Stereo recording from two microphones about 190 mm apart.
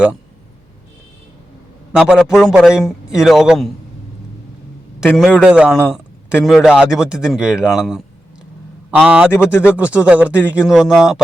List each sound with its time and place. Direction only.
2.0 s a man's voice: 5° right (ahead or behind)
5.0 s a man's voice: centre (ahead or behind)